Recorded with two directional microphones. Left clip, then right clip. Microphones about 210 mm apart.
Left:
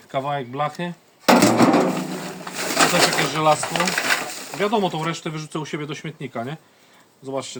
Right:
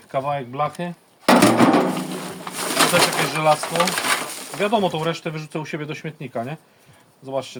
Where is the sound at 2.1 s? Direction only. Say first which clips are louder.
Even; 10° right (ahead or behind).